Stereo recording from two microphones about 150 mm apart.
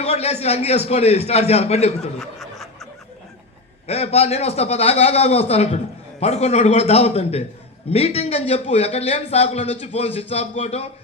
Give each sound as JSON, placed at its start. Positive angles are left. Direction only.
{"t": 0.0, "sound": "a man's voice", "side_deg": 45}
{"t": 2.1, "sound": "chuckle", "side_deg": 0}
{"t": 3.8, "sound": "a man's voice", "side_deg": 45}